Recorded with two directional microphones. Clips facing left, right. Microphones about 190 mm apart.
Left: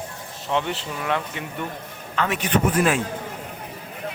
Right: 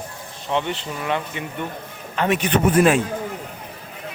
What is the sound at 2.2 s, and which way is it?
Speech, 20° right (ahead or behind).